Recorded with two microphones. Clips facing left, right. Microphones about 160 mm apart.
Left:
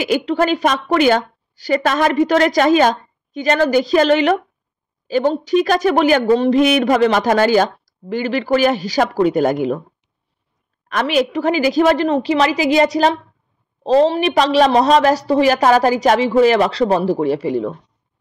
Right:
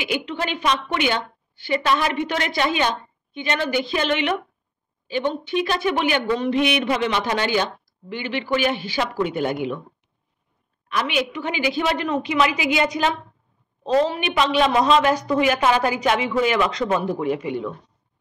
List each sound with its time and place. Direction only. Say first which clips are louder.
0.0 s speech: left 9 dB; 40° left (ahead or behind)
10.9 s speech: left 7 dB; 45° left (ahead or behind)